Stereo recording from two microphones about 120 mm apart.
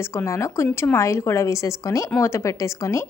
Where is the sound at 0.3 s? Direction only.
25° left (ahead or behind).